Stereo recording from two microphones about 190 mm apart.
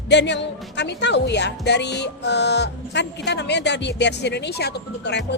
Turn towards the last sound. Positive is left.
turn(degrees=65)  # may be behind; listen again after turning